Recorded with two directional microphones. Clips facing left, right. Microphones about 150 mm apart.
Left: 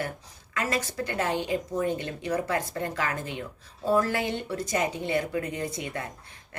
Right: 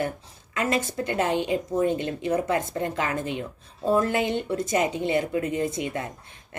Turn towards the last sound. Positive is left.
turn(degrees=-20)  # may be behind; listen again after turning